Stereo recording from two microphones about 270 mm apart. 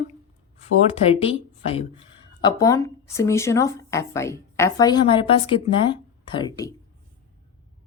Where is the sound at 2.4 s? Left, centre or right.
Centre.